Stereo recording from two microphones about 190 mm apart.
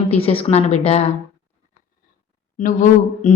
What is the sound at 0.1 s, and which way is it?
Speech, 30° left (ahead or behind).